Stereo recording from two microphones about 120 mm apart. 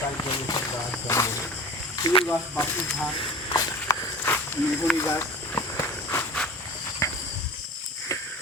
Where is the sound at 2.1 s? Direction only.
40° left (ahead or behind).